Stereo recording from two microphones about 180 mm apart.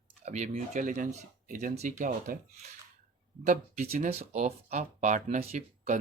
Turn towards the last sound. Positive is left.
turn(degrees=-45)  # may be behind; listen again after turning